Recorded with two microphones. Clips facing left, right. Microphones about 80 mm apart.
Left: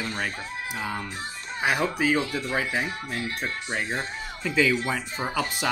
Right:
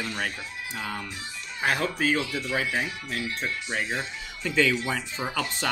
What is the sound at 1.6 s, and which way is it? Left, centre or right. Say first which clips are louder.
Speech: left 1 dB; centre.